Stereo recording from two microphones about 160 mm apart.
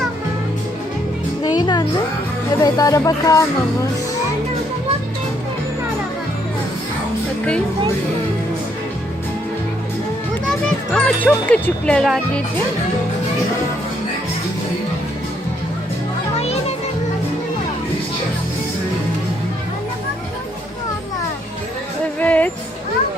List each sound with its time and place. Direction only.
1.5 s music: 25° left (ahead or behind)
2.6 s speech: 20° left (ahead or behind)
10.7 s speech: 10° left (ahead or behind)
16.4 s children playing: 40° left (ahead or behind)
22.2 s music: 10° left (ahead or behind)